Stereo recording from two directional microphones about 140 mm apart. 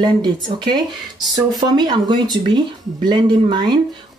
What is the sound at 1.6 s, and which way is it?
Speech, 30° right (ahead or behind).